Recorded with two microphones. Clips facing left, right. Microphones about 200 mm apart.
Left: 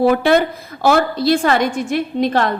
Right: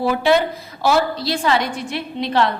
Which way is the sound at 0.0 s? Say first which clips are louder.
Left 3 dB; 55° left (ahead or behind).